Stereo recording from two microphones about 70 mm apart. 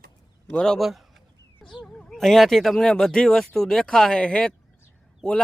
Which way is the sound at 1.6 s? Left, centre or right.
Centre.